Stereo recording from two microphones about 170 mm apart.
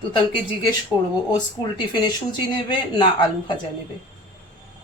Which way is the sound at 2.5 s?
25° left (ahead or behind).